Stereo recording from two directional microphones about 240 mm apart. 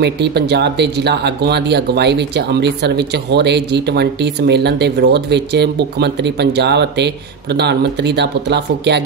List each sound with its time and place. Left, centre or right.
0.0 s speech: right